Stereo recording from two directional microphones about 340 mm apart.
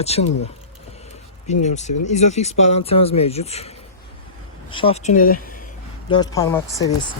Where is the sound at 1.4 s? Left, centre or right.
Centre.